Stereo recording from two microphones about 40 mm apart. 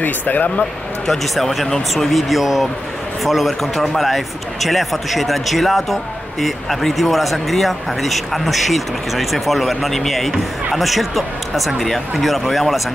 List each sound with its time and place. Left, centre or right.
0.0 s speech: left
1.0 s speech: centre